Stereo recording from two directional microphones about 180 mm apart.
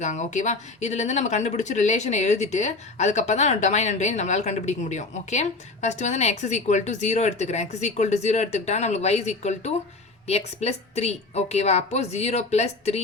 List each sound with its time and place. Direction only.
0.0 s speech: 40° left (ahead or behind)